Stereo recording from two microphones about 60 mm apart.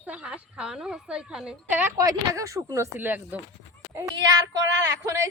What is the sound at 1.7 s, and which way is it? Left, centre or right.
Speech, right.